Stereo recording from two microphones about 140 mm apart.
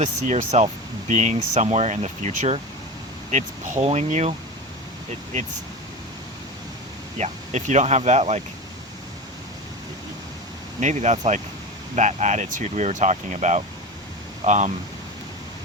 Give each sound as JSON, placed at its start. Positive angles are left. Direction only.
{"t": 0.0, "sound": "speech", "side_deg": -60}
{"t": 7.2, "sound": "speech", "side_deg": -55}
{"t": 10.8, "sound": "speech", "side_deg": -55}